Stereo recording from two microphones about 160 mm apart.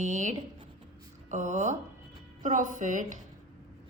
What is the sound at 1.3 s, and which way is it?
A woman's voice, 50° right (ahead or behind).